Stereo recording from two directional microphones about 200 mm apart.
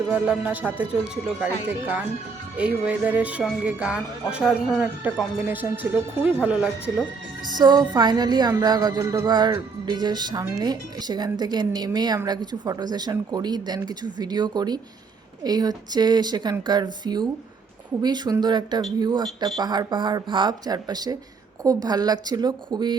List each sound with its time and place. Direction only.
0.1 s speech: 10° right (ahead or behind)
2.6 s speech: 5° right (ahead or behind)
7.4 s speech: 20° right (ahead or behind)